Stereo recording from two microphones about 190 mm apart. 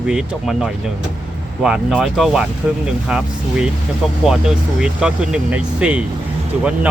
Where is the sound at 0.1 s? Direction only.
5° right (ahead or behind).